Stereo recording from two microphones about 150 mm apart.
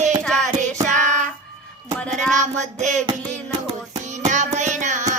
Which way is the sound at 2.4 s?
50° right (ahead or behind).